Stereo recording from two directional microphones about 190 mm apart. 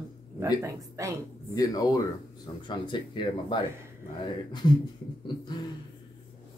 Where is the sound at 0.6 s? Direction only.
15° right (ahead or behind).